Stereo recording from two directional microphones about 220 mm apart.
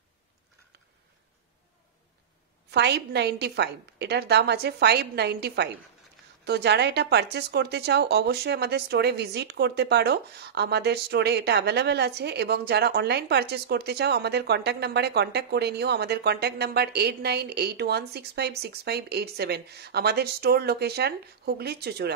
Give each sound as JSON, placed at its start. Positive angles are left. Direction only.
{"t": 2.7, "sound": "speech", "side_deg": -50}